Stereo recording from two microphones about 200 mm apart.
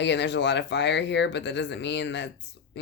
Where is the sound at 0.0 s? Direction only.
60° left (ahead or behind).